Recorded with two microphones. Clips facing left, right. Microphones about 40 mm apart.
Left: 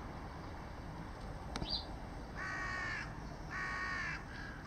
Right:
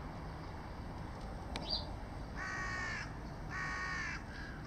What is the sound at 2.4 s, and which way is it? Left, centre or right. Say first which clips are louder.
Crow: even; centre.